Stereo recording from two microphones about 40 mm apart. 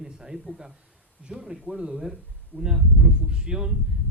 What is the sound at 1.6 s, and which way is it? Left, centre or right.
Speech, right.